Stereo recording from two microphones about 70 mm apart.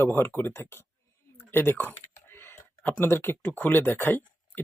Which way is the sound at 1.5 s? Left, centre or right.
Left.